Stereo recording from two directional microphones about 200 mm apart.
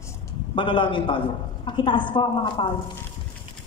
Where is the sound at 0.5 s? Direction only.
25° left (ahead or behind).